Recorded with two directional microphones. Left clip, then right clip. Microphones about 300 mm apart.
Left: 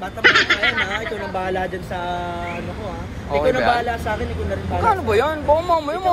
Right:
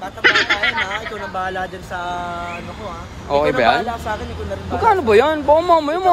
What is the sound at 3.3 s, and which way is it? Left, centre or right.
Speech, right.